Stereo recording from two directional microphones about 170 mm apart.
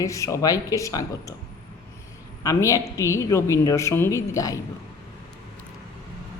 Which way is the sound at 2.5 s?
20° left (ahead or behind).